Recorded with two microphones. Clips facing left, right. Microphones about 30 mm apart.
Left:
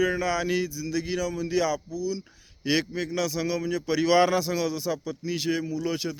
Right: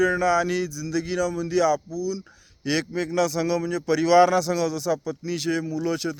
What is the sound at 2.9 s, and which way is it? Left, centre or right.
Speech, centre.